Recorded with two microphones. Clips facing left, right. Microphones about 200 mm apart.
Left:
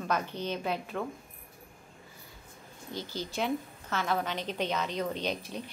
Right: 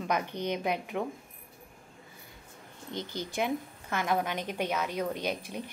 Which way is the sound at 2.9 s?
15° right (ahead or behind).